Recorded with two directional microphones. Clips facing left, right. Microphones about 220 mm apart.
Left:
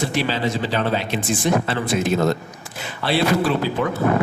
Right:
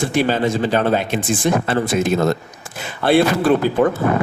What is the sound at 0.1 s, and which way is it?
Speech, 50° right (ahead or behind).